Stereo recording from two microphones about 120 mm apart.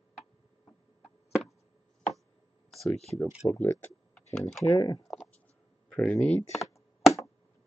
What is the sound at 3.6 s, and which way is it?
Speech, 20° left (ahead or behind).